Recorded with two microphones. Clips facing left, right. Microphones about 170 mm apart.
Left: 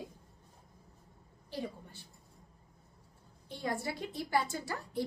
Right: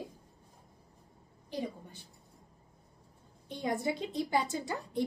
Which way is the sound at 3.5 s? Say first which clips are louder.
Right 4 dB; 20° right (ahead or behind).